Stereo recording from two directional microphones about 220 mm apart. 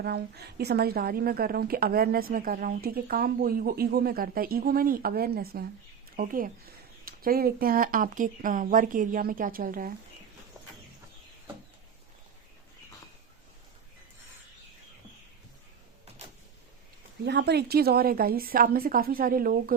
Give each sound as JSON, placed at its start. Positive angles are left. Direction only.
{"t": 0.0, "sound": "a woman's voice", "side_deg": -45}
{"t": 17.2, "sound": "a woman's voice", "side_deg": -50}